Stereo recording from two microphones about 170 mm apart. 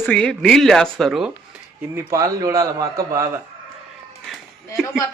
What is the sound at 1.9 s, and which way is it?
A man's voice, 20° right (ahead or behind).